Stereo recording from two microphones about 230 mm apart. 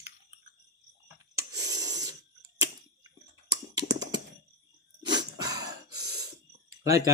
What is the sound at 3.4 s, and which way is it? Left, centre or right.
Computer keyboard, centre.